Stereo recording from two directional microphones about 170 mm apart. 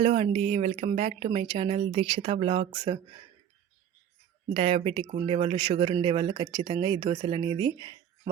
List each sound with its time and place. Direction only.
0.0 s a woman's voice: 35° right (ahead or behind)
4.5 s a woman's voice: 35° right (ahead or behind)